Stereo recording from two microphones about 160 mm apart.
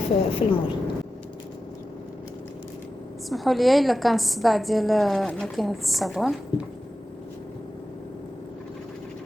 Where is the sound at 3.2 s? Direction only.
Centre (ahead or behind).